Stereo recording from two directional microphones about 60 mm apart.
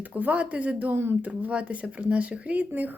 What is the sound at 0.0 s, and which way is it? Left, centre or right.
Speech, right.